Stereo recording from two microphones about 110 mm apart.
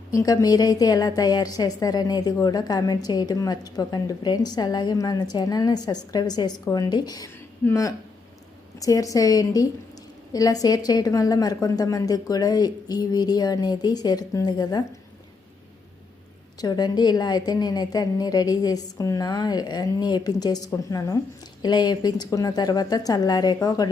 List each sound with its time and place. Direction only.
0.1 s a woman's voice: 30° left (ahead or behind)
16.6 s a woman's voice: 40° left (ahead or behind)